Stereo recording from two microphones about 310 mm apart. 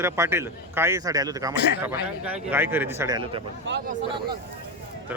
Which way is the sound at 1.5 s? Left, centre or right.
Left.